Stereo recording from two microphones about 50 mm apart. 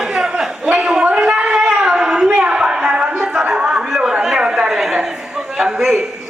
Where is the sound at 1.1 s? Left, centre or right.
Centre.